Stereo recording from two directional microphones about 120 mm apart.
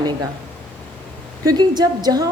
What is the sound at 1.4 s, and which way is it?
Speech, 35° right (ahead or behind).